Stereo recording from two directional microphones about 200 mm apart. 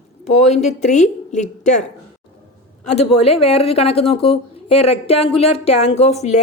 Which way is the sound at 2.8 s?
30° left (ahead or behind).